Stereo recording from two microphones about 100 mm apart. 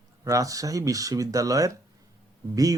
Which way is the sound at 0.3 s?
35° right (ahead or behind).